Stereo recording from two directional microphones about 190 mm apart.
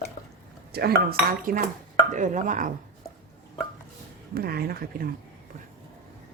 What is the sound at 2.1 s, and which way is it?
Chopping, 40° right (ahead or behind).